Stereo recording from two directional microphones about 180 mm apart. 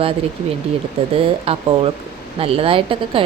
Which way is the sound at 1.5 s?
30° right (ahead or behind).